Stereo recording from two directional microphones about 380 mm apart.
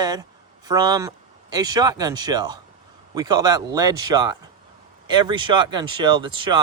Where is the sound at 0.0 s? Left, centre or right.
Centre.